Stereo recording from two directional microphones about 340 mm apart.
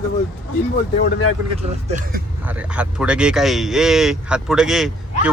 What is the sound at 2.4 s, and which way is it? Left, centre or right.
Speech, centre.